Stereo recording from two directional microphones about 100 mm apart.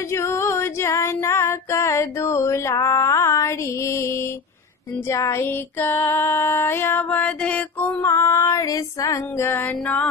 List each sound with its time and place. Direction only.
0.1 s female singing: 25° left (ahead or behind)
5.0 s music: 25° left (ahead or behind)
8.0 s music: 30° left (ahead or behind)